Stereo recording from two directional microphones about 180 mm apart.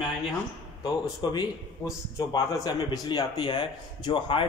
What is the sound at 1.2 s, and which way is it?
A man's voice, 25° left (ahead or behind).